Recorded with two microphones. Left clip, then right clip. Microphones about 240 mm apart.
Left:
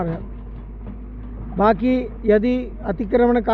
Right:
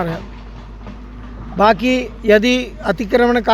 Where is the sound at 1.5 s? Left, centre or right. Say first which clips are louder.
Right 4 dB; centre.